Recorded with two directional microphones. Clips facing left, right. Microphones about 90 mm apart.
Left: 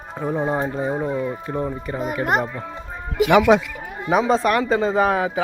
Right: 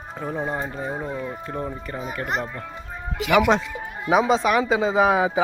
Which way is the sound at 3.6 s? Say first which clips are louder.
Right 1 dB; 25° right (ahead or behind).